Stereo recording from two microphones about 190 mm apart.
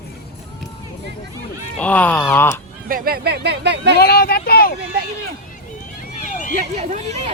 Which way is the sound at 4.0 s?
55° left (ahead or behind).